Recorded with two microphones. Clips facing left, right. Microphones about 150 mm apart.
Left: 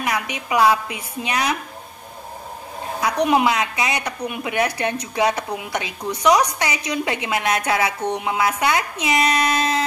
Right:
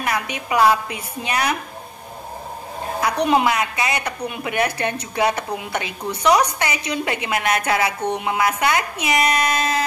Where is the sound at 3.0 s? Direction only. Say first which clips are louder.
Even; 15° left (ahead or behind).